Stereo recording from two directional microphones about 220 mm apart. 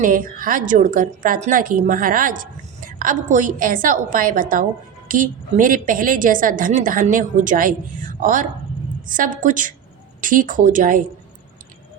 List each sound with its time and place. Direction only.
0.0 s a woman's voice: 40° right (ahead or behind)